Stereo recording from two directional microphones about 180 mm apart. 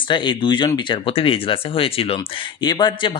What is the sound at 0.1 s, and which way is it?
Speech, 25° left (ahead or behind).